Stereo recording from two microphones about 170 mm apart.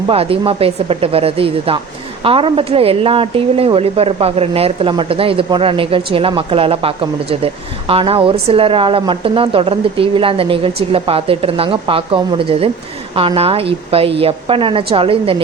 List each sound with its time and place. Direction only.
0.1 s a woman's voice: 35° right (ahead or behind)